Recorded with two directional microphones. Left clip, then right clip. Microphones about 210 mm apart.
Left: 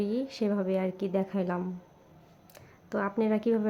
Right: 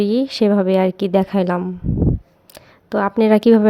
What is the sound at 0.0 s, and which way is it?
A woman's voice, 40° right (ahead or behind).